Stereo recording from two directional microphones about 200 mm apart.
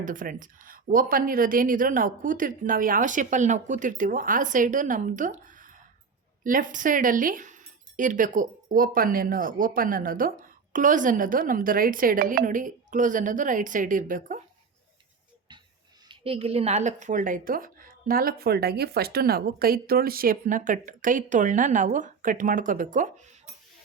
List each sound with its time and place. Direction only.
0.0 s speech: 40° right (ahead or behind)
16.0 s speech: 30° right (ahead or behind)